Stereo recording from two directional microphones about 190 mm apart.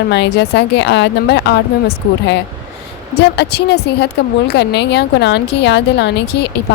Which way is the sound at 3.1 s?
60° left (ahead or behind).